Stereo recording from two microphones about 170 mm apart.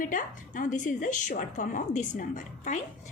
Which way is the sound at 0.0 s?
50° left (ahead or behind).